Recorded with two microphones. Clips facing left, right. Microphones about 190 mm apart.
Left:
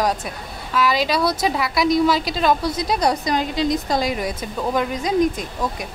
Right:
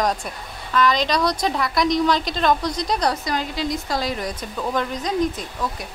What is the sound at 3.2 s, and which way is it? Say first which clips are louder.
A woman's voice: left 4 dB; 20° left (ahead or behind).